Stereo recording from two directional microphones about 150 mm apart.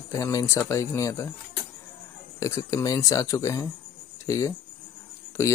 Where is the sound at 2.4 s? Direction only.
20° left (ahead or behind).